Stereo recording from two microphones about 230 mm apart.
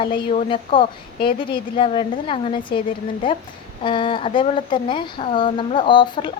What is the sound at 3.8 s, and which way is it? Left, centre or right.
Speech, left.